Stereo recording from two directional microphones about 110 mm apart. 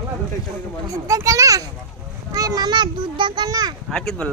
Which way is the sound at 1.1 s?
30° right (ahead or behind).